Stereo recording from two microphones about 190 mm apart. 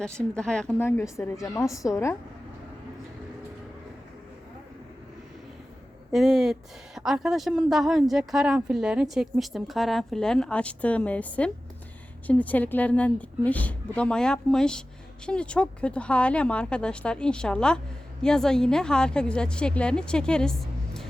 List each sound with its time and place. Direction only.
0.0 s a woman's voice: 5° left (ahead or behind)
6.1 s a woman's voice: centre (ahead or behind)